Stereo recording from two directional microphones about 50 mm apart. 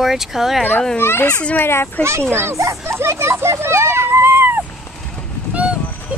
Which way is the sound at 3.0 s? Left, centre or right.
Right.